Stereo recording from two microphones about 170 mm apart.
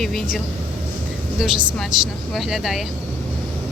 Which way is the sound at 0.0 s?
Centre (ahead or behind).